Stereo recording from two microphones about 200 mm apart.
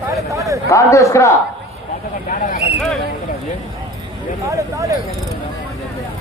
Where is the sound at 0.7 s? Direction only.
15° left (ahead or behind).